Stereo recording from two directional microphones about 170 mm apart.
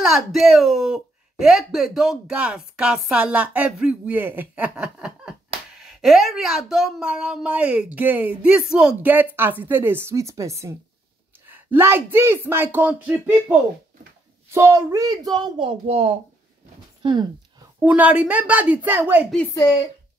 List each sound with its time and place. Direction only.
0.0 s a woman's voice: centre (ahead or behind); by 16.2 s 35° right (ahead or behind)
17.0 s speech: 25° right (ahead or behind)
17.8 s a woman's voice: 10° right (ahead or behind)